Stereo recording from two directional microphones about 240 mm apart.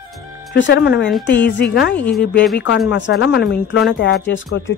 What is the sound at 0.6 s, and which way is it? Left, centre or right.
Speech, left.